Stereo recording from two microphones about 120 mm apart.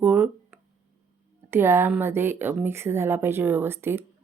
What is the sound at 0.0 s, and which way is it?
Speech, 15° right (ahead or behind).